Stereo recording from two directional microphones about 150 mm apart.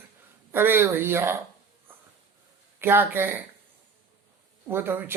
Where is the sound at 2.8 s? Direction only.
15° right (ahead or behind).